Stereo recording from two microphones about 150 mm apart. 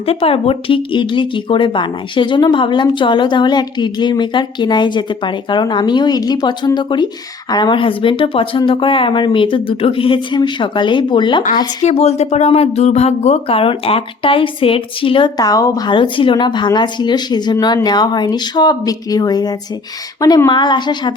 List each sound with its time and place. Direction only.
0.0 s speech: 40° left (ahead or behind)
11.8 s speech: 45° left (ahead or behind); by 21.1 s 30° left (ahead or behind)